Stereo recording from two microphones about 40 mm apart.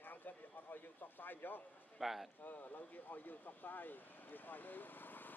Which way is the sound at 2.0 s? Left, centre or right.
Centre.